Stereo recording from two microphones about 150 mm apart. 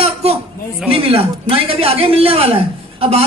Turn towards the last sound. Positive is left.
turn(degrees=-40)  # may be behind; listen again after turning